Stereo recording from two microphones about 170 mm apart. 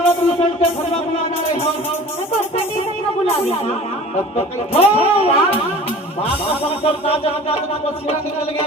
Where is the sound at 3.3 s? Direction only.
40° left (ahead or behind).